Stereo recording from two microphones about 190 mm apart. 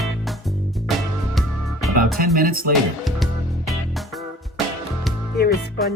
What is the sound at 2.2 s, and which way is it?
Speech, 50° right (ahead or behind).